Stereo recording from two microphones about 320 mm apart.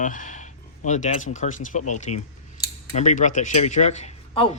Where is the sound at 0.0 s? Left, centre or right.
Left.